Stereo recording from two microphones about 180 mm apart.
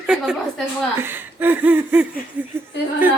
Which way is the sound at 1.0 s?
10° right (ahead or behind).